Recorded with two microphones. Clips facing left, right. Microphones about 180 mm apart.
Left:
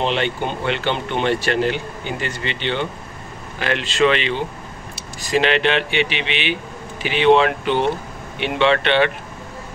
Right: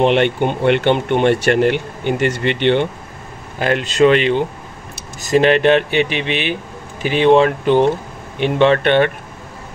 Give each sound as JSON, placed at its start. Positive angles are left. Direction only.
{"t": 0.0, "sound": "speech", "side_deg": -55}
{"t": 3.5, "sound": "speech", "side_deg": -45}